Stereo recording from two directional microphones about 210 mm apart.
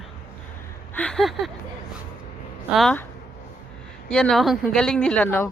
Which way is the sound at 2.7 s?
5° left (ahead or behind).